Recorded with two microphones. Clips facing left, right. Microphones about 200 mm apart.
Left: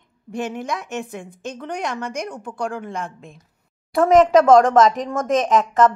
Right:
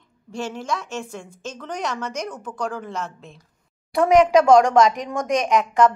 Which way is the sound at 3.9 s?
Centre (ahead or behind).